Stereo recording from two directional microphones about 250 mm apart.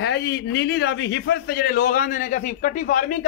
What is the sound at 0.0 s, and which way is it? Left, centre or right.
A man's voice, left.